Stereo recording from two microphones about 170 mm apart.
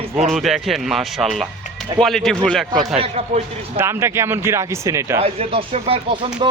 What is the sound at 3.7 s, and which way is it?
Speech, 15° right (ahead or behind).